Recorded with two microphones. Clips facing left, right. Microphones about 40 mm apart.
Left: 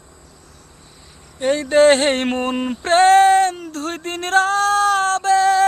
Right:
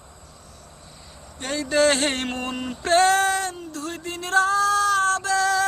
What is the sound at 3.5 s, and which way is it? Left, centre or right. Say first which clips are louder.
Female singing: left 5 dB; left.